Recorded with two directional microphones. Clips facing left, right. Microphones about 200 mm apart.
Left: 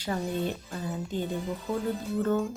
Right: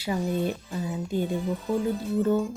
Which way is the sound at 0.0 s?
10° right (ahead or behind).